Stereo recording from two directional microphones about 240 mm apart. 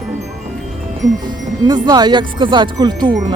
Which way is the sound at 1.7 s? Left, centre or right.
Centre.